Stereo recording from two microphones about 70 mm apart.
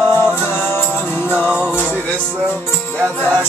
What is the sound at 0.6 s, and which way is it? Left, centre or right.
Music, left.